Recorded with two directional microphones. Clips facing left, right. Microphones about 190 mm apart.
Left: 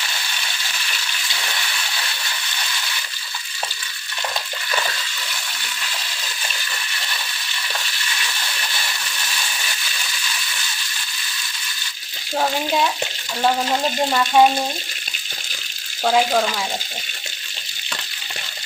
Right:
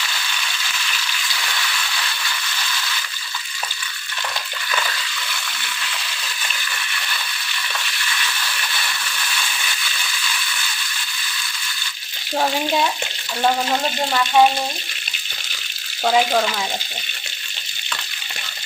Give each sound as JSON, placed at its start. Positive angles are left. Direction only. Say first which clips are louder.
{"t": 1.3, "sound": "a sound", "louder": "even", "side_deg": 25}
{"t": 12.4, "sound": "frying", "louder": "even", "side_deg": -5}
{"t": 13.4, "sound": "speech", "louder": "even", "side_deg": 10}
{"t": 16.0, "sound": "frying", "louder": "even", "side_deg": 0}